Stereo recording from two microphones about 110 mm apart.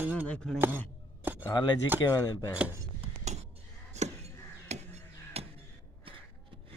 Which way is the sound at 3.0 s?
80° right.